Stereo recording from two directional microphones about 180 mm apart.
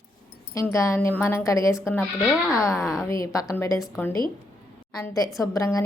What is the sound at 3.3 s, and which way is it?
Speech, 15° left (ahead or behind).